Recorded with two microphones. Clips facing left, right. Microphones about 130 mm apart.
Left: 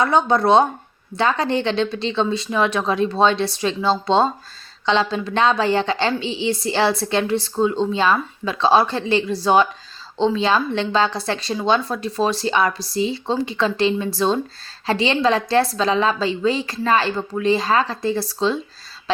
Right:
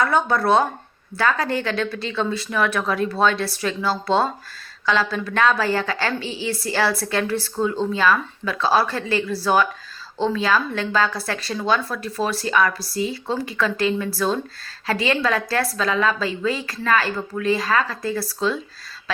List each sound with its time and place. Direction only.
0.0 s a woman's voice: 20° left (ahead or behind)